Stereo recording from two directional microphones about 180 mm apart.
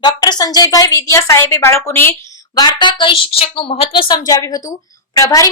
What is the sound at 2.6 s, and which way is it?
A woman's voice, 25° left (ahead or behind).